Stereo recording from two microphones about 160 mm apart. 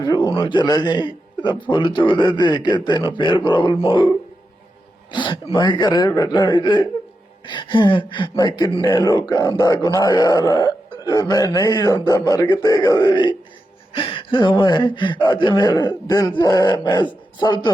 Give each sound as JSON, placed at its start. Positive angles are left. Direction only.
{"t": 0.0, "sound": "speech", "side_deg": 25}
{"t": 5.1, "sound": "speech", "side_deg": 30}